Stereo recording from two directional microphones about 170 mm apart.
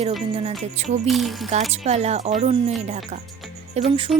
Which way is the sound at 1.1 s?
Centre (ahead or behind).